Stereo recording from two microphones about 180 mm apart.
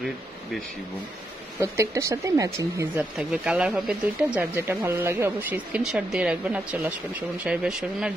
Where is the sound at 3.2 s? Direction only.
5° right (ahead or behind).